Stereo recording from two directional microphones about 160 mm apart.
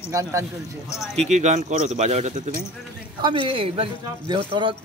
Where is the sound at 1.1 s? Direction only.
45° right (ahead or behind).